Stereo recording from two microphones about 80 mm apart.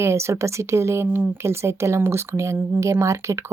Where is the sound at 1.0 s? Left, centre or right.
Right.